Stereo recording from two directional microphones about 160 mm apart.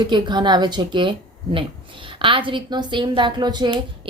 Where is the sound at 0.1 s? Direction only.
30° right (ahead or behind).